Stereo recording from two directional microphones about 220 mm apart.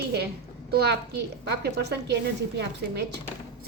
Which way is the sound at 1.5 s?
50° right (ahead or behind).